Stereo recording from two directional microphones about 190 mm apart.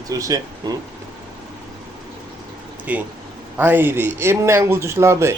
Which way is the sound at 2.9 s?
10° right (ahead or behind).